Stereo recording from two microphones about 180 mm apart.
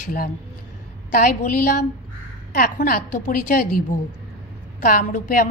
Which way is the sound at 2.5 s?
50° left (ahead or behind).